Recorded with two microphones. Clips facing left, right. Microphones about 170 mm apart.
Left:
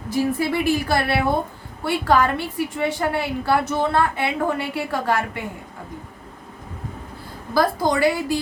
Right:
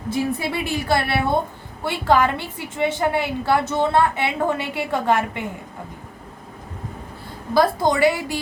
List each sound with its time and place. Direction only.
0.1 s a woman's voice: 25° right (ahead or behind)
7.5 s a woman's voice: 25° right (ahead or behind)